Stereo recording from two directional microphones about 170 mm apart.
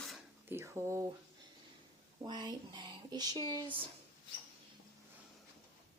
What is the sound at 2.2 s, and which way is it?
Speech, 25° right (ahead or behind).